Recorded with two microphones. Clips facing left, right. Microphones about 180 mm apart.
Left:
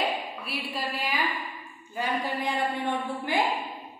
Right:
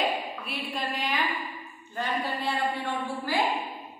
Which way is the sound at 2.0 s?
15° left (ahead or behind).